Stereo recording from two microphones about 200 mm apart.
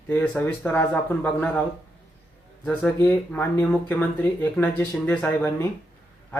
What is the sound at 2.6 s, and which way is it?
Speech, 5° left (ahead or behind).